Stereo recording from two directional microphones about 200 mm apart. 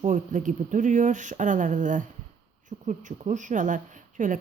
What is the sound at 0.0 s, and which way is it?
A woman's voice, 40° right (ahead or behind).